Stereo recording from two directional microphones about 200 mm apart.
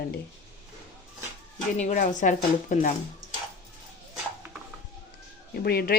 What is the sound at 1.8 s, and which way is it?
Speech, 35° left (ahead or behind).